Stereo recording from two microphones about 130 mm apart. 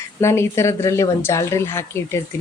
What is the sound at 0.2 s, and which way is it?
Speech, 20° left (ahead or behind).